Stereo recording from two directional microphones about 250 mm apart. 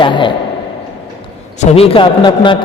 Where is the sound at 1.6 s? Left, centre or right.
Left.